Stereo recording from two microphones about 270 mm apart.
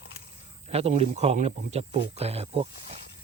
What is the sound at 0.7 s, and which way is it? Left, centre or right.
Speech, right.